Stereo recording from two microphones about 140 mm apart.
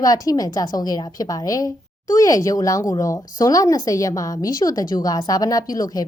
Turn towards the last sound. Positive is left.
turn(degrees=25)  # may be behind; listen again after turning